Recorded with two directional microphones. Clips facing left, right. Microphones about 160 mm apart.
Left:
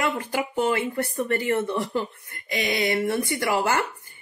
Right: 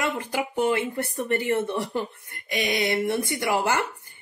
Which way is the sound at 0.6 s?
20° right (ahead or behind).